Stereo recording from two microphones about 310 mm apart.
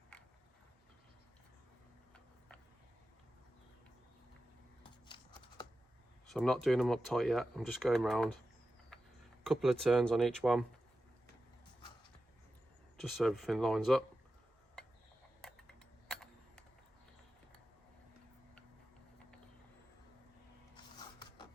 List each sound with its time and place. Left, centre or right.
4.8 s a sound: centre
6.2 s speech: centre
8.9 s creak: centre
9.4 s speech: centre
13.0 s speech: centre
15.4 s a sound: centre